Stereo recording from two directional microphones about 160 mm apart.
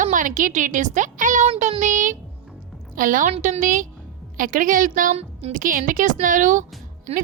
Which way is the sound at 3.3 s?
45° right (ahead or behind).